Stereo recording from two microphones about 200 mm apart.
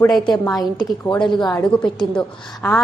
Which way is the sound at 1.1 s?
25° left (ahead or behind).